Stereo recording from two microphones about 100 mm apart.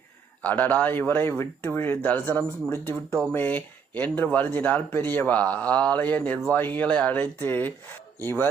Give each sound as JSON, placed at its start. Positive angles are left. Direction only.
{"t": 0.4, "sound": "speech", "side_deg": 15}